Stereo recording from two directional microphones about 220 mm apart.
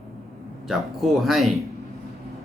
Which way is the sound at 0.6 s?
Centre (ahead or behind).